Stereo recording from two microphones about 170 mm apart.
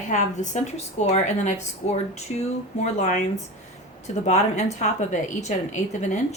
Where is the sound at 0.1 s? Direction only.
45° left (ahead or behind).